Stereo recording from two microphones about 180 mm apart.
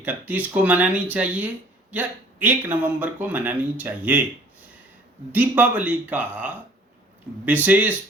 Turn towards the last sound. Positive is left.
turn(degrees=-10)  # may be behind; listen again after turning